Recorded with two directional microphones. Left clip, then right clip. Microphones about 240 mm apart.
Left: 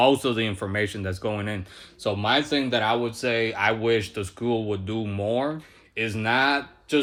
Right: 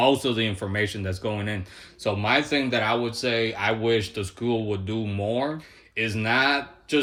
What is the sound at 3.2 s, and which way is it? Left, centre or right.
Speech, centre.